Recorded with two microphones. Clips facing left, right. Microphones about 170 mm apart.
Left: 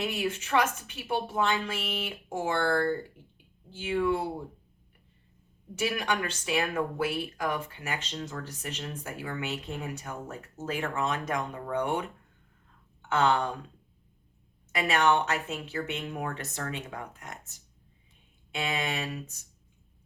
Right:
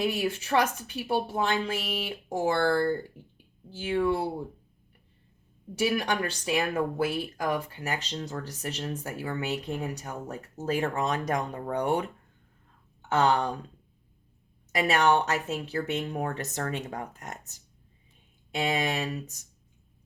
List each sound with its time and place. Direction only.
0.0 s speech: 35° right (ahead or behind)
3.8 s speech: 35° right (ahead or behind)
5.9 s speech: 35° right (ahead or behind)
7.8 s speech: 35° right (ahead or behind)
13.1 s speech: 40° right (ahead or behind)
14.7 s speech: 40° right (ahead or behind)